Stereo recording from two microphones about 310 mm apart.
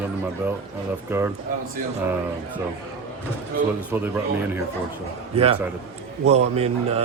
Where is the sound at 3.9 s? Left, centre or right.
Centre.